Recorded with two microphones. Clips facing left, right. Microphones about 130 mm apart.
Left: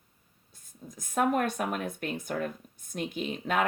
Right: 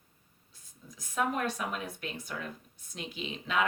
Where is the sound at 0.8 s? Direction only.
50° left (ahead or behind).